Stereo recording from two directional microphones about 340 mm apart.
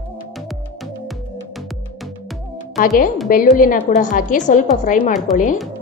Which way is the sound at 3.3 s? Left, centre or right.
Left.